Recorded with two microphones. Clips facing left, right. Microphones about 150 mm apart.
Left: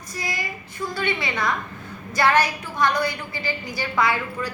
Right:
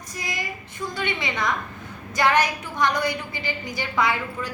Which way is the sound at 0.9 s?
20° right (ahead or behind).